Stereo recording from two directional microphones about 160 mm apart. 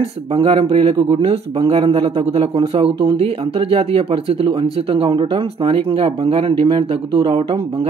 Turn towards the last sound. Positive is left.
turn(degrees=-35)  # may be behind; listen again after turning